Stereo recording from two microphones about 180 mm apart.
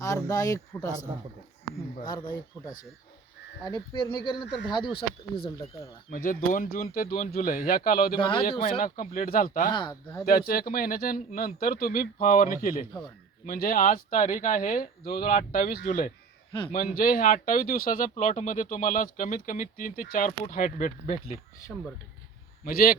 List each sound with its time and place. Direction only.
0.0 s speech: 20° left (ahead or behind)
2.0 s speech: 25° left (ahead or behind)
6.1 s speech: 50° left (ahead or behind)
8.2 s speech: 25° left (ahead or behind)
8.8 s speech: 50° left (ahead or behind)
9.6 s speech: 25° left (ahead or behind)
10.2 s speech: 55° left (ahead or behind)
21.7 s speech: 5° left (ahead or behind)
22.6 s a man's voice: 55° left (ahead or behind)